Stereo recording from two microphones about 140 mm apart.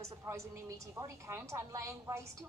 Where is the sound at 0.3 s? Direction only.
20° right (ahead or behind).